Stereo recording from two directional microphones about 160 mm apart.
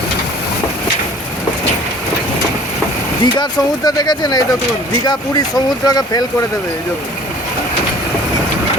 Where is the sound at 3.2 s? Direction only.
25° left (ahead or behind).